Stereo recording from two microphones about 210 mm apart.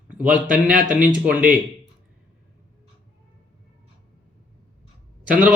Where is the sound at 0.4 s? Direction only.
40° right (ahead or behind).